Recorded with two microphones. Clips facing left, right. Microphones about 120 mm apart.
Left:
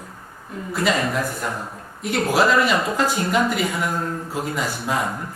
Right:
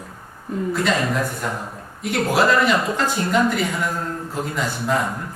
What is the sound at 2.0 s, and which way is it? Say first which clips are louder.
A man's voice: even; centre (ahead or behind).